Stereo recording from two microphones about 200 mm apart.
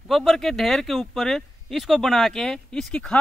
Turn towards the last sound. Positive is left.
turn(degrees=5)  # may be behind; listen again after turning